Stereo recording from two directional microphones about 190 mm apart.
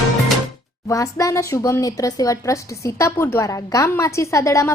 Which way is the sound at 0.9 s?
15° left (ahead or behind).